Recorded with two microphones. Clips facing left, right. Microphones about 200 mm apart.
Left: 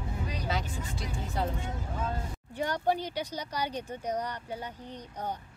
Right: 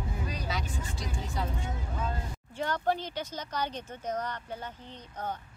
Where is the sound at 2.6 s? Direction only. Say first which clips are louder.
Left 1 dB; 15° left (ahead or behind).